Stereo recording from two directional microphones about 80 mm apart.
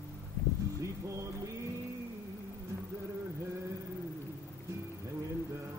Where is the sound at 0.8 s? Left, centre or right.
Right.